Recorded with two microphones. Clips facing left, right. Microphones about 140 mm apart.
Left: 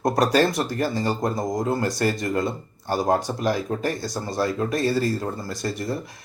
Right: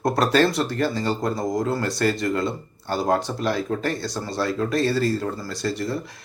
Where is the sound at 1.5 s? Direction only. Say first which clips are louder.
Even; 20° left (ahead or behind).